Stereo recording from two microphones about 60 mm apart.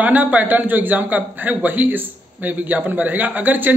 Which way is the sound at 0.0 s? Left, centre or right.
Right.